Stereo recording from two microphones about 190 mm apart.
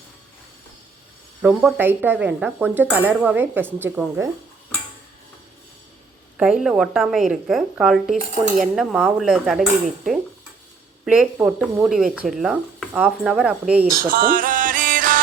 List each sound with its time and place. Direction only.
1.4 s speech: 5° right (ahead or behind)
6.3 s speech: 5° right (ahead or behind)
14.1 s music: 50° right (ahead or behind)